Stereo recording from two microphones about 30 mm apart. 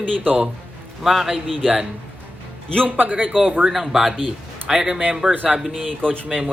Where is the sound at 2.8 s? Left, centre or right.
Right.